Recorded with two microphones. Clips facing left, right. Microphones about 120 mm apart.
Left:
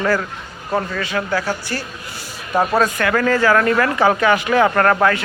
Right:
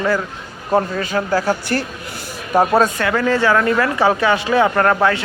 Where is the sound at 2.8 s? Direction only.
25° right (ahead or behind).